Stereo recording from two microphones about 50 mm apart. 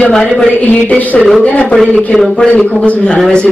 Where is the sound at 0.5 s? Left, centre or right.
Left.